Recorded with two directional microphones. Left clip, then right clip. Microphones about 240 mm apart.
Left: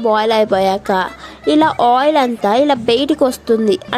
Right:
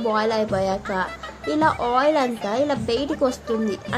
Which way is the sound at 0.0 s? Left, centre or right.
Left.